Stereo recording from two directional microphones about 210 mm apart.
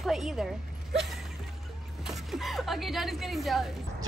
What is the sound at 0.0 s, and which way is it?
Speech, centre (ahead or behind).